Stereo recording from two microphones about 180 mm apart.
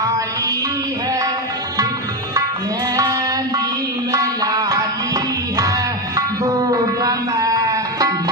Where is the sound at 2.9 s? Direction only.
20° right (ahead or behind).